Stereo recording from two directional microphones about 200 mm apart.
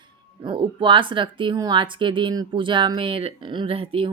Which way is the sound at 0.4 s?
25° right (ahead or behind).